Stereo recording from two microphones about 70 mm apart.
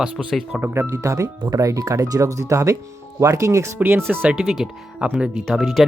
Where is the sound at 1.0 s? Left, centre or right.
Right.